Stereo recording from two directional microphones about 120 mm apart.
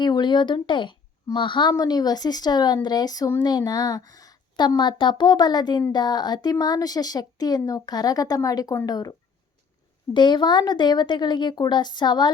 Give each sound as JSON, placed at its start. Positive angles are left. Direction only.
{"t": 0.0, "sound": "speech", "side_deg": 40}
{"t": 10.2, "sound": "speech", "side_deg": 40}